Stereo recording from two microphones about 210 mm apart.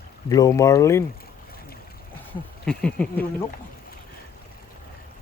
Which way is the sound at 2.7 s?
5° left (ahead or behind).